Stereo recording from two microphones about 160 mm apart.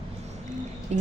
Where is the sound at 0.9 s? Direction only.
45° right (ahead or behind).